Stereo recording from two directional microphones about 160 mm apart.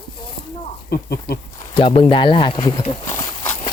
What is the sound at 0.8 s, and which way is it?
Speech, 80° left.